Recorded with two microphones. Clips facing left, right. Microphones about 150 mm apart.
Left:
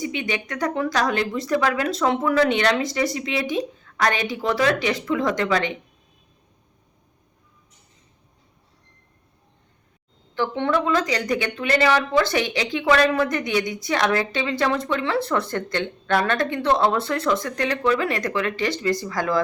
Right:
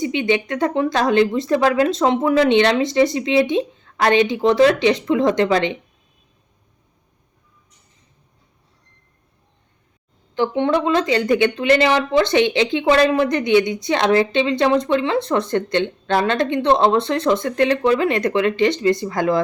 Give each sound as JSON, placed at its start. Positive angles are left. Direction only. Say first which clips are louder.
{"t": 0.0, "sound": "speech", "louder": "right 8 dB", "side_deg": -25}
{"t": 10.3, "sound": "speech", "louder": "right 4 dB", "side_deg": -15}